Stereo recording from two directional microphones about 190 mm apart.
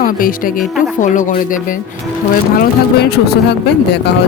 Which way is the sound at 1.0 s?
40° left (ahead or behind).